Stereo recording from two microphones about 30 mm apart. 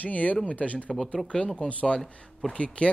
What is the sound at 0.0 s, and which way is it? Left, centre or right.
Speech, left.